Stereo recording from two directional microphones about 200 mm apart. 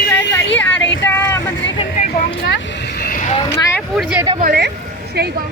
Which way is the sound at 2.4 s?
55° left (ahead or behind).